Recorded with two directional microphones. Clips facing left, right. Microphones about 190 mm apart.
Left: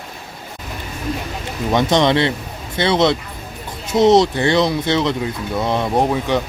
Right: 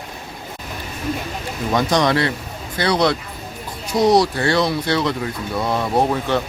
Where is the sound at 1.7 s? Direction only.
25° left (ahead or behind).